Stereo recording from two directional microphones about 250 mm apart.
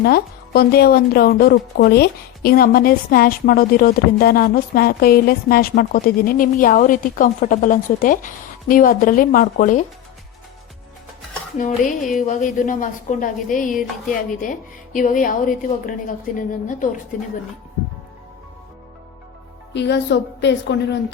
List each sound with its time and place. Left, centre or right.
0.0 s speech: left
11.6 s speech: left
19.7 s a woman's voice: left